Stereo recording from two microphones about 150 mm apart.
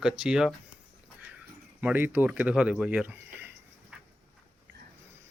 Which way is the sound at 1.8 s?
15° right (ahead or behind).